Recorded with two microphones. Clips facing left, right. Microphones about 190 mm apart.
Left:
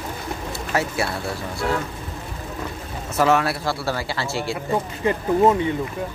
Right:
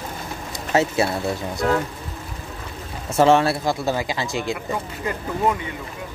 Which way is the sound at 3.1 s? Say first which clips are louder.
Right 3 dB; 25° right (ahead or behind).